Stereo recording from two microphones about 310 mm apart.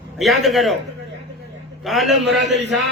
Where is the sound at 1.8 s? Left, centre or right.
Centre.